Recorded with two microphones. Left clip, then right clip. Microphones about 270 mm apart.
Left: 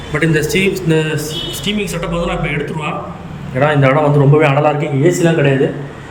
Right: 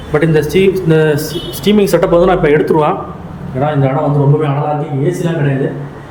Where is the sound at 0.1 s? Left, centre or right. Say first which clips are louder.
Right 3 dB; centre.